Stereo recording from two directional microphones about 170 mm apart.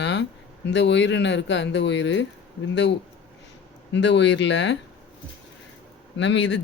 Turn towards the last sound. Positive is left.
turn(degrees=90)